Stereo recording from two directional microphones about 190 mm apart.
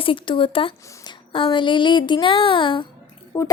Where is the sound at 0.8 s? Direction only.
15° left (ahead or behind).